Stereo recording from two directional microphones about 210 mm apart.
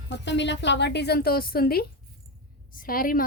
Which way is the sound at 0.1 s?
55° left (ahead or behind).